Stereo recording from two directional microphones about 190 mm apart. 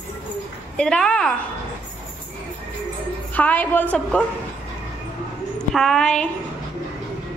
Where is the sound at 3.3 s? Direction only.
10° left (ahead or behind).